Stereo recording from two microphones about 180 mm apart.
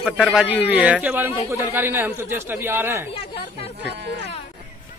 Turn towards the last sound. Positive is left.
turn(degrees=-70)  # may be behind; listen again after turning